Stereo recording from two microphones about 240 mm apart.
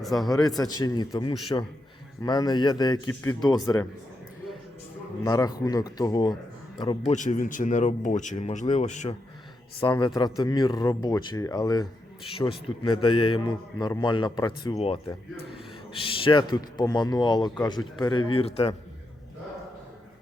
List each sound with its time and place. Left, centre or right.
0.0 s speech: centre
0.3 s speech: centre
5.2 s speech: centre